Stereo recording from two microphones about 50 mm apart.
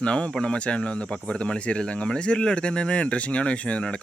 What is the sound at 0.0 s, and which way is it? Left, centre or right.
Speech, left.